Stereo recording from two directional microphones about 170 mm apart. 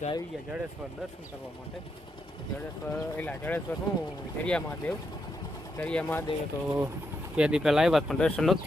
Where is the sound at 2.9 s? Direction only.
10° left (ahead or behind).